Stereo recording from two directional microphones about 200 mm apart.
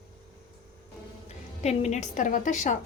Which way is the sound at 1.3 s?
35° left (ahead or behind).